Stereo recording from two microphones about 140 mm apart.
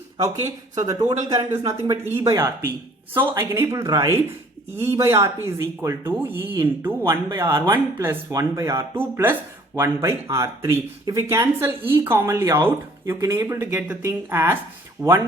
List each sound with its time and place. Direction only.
0.2 s speech: 25° right (ahead or behind)